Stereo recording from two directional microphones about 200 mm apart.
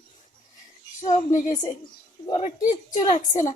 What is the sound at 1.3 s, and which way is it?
Speech, 40° left (ahead or behind).